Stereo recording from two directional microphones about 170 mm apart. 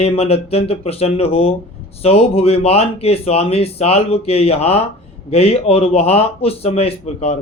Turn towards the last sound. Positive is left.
turn(degrees=40)  # may be behind; listen again after turning